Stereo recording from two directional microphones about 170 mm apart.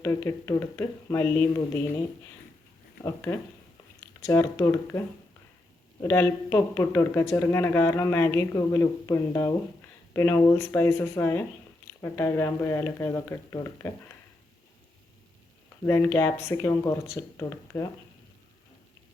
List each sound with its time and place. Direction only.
0.0 s speech: 15° left (ahead or behind)
3.0 s speech: 15° left (ahead or behind)
15.9 s speech: 15° left (ahead or behind)